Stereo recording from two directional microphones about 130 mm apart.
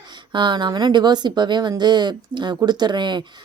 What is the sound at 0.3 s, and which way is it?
Speech, 35° right (ahead or behind).